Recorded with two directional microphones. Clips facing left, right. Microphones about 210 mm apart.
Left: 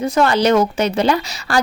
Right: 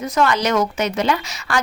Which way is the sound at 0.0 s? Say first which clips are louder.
Left 4 dB; 30° left (ahead or behind).